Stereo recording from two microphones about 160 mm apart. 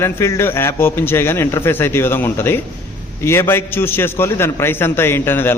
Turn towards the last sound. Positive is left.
turn(degrees=15)  # may be behind; listen again after turning